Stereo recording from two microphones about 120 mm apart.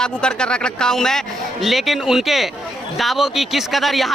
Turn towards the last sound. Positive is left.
turn(degrees=0)  # may be behind; listen again after turning